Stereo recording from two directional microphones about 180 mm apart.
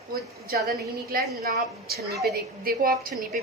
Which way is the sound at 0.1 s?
55° right (ahead or behind).